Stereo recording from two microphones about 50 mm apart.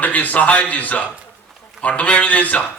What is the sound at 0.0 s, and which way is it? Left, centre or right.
A man's voice, left.